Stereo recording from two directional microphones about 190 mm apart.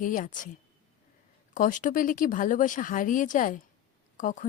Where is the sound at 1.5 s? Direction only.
40° left (ahead or behind).